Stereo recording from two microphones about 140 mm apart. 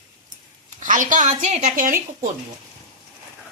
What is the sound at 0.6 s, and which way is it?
A woman's voice, 65° right (ahead or behind).